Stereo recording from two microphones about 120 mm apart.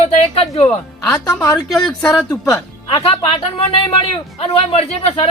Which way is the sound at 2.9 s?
50° left (ahead or behind).